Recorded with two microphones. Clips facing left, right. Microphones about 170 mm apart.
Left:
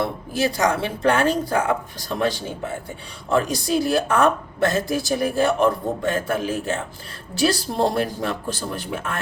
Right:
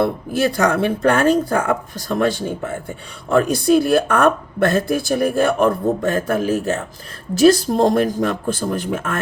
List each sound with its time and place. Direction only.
0.0 s speech: 55° right (ahead or behind)